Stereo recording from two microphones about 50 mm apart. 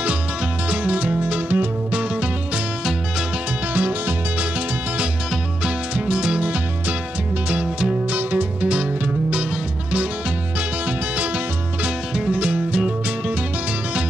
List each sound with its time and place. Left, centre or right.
0.7 s music: right
4.4 s music: right
8.2 s music: right
8.6 s music: right
10.9 s music: right